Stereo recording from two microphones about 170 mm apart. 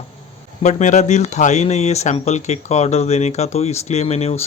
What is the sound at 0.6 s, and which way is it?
Speech, 45° left (ahead or behind).